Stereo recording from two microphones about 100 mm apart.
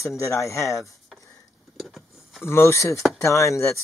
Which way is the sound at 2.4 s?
25° left (ahead or behind).